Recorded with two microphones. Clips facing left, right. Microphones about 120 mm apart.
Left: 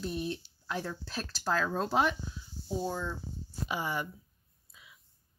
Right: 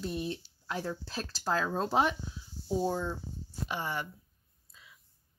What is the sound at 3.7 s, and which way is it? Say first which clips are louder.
Speech: left 1 dB; 10° left (ahead or behind).